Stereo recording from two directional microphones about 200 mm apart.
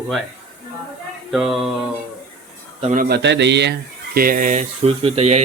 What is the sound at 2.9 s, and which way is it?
Speech, 50° right (ahead or behind).